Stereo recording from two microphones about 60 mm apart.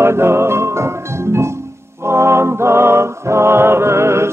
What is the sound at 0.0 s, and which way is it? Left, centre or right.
Music, right.